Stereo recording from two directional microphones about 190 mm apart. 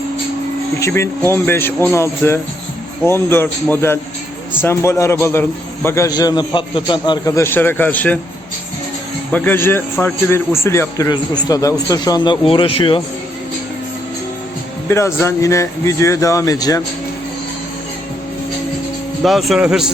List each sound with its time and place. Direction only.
0.8 s a man's voice: 15° left (ahead or behind)
9.3 s a man's voice: 10° left (ahead or behind); by 13.0 s 25° left (ahead or behind)
14.8 s a man's voice: 15° left (ahead or behind)
19.2 s speech: centre (ahead or behind)